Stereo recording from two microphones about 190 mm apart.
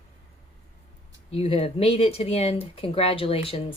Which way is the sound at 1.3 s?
30° left (ahead or behind).